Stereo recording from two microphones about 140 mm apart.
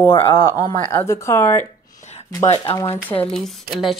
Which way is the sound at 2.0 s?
50° left (ahead or behind).